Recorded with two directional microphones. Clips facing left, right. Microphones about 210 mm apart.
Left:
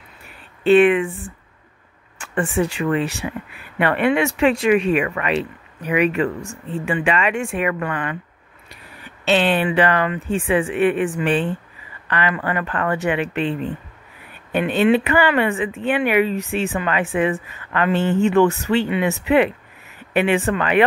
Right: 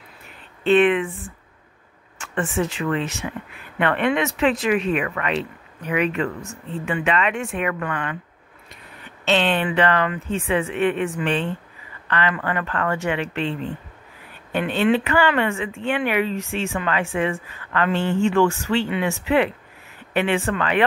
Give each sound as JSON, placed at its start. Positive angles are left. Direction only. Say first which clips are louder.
{"t": 0.7, "sound": "speech", "louder": "left 3 dB", "side_deg": 0}
{"t": 2.8, "sound": "speech", "louder": "left 3 dB", "side_deg": 15}
{"t": 9.2, "sound": "speech", "louder": "left 3 dB", "side_deg": 10}